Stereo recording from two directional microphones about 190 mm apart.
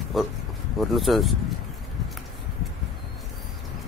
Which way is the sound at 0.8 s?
Centre (ahead or behind).